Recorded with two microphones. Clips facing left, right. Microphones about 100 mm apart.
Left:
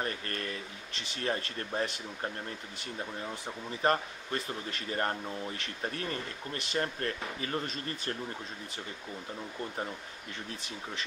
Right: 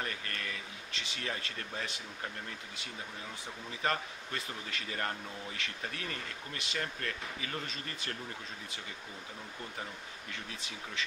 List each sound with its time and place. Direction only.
0.0 s speech: 35° left (ahead or behind)
3.8 s speech: 35° left (ahead or behind)